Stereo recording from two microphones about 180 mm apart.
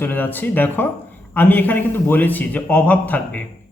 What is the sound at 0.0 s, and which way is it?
A man's voice, 10° left (ahead or behind).